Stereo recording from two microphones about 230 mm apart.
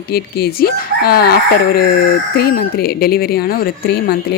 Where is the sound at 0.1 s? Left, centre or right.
Left.